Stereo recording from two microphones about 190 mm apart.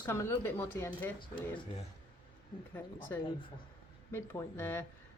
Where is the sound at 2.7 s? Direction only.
10° left (ahead or behind).